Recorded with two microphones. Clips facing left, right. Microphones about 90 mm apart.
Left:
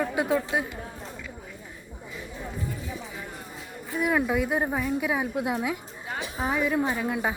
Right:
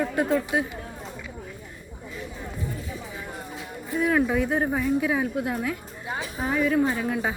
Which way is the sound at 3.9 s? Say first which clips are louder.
Right 2 dB; 5° left (ahead or behind).